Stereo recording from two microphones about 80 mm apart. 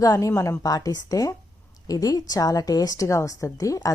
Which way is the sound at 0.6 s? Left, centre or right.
Left.